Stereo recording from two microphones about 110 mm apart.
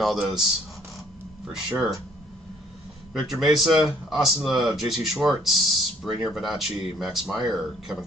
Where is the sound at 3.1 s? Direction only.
5° right (ahead or behind).